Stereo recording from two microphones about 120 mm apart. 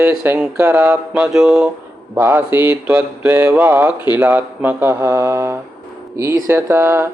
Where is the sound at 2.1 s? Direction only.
15° right (ahead or behind).